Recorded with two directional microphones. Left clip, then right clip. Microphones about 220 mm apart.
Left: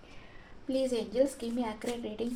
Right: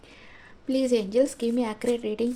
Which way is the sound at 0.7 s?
50° right (ahead or behind).